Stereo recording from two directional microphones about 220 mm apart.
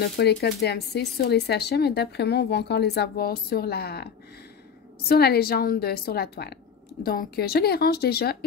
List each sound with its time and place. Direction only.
0.0 s speech: 50° left (ahead or behind)